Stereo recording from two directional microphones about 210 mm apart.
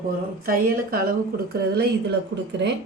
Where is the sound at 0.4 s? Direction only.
45° right (ahead or behind).